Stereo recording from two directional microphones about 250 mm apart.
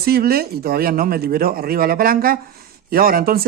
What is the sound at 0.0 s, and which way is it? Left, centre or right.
Speech, right.